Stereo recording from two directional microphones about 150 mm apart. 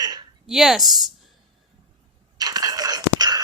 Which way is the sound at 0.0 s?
25° right (ahead or behind).